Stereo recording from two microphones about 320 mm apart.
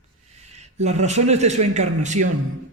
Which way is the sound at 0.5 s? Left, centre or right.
Right.